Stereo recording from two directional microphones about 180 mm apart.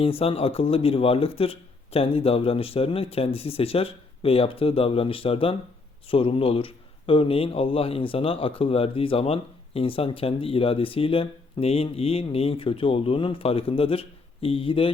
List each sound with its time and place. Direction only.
0.0 s speech: 30° left (ahead or behind)